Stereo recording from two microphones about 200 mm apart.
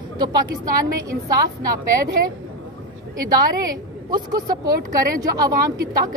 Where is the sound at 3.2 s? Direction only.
20° right (ahead or behind).